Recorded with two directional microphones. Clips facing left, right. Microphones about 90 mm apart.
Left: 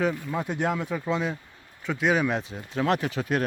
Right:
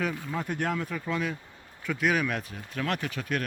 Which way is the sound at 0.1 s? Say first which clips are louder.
Left 3 dB; 5° left (ahead or behind).